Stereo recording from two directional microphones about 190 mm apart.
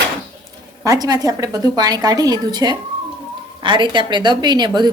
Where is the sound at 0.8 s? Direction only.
20° right (ahead or behind).